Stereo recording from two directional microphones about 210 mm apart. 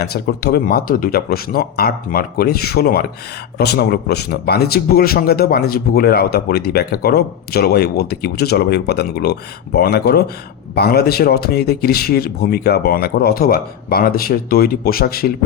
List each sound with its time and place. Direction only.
0.0 s speech: 50° left (ahead or behind)